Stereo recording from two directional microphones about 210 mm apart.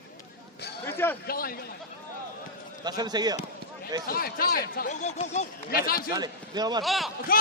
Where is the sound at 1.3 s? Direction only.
45° left (ahead or behind).